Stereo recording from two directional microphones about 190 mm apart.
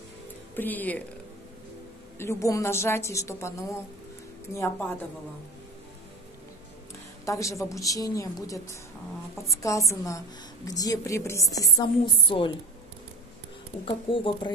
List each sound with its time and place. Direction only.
0.6 s a woman's voice: 10° left (ahead or behind)
2.1 s a woman's voice: 15° left (ahead or behind)
7.2 s a woman's voice: 15° left (ahead or behind)
13.8 s a woman's voice: 25° left (ahead or behind)